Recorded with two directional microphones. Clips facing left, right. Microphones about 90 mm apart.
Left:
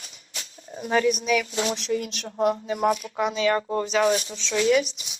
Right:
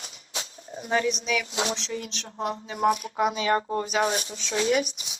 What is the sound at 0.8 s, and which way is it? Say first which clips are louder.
Speech: left 3 dB; centre (ahead or behind).